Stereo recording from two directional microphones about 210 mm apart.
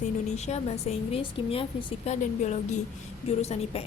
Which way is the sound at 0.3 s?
30° left (ahead or behind).